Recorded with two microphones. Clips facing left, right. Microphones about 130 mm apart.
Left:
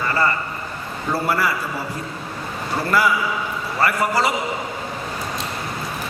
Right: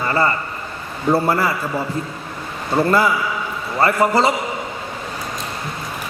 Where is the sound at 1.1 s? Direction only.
25° right (ahead or behind).